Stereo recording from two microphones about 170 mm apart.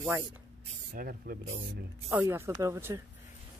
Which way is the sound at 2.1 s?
15° right (ahead or behind).